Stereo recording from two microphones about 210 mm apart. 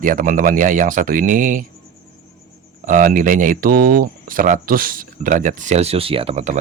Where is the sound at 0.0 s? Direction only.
40° right (ahead or behind).